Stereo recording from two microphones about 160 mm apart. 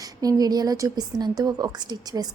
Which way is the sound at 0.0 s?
20° right (ahead or behind).